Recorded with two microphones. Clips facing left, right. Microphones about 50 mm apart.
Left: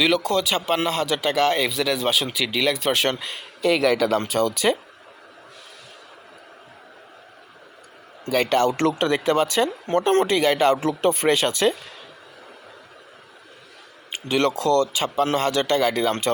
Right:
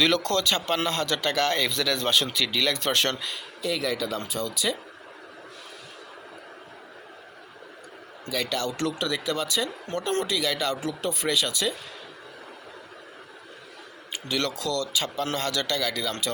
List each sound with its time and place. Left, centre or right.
0.0 s speech: centre
3.2 s speech: left
3.6 s speech: left
8.3 s speech: left
14.1 s speech: left